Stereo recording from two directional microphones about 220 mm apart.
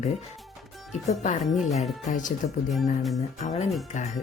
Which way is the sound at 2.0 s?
35° left (ahead or behind).